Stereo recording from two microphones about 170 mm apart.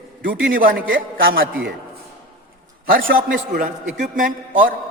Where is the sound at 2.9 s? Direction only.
60° right (ahead or behind).